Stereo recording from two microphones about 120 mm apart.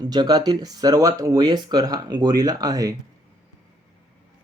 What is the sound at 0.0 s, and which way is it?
Speech, 35° right (ahead or behind).